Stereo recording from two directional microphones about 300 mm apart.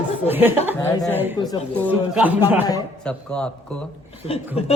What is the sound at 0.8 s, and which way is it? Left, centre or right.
Speech, centre.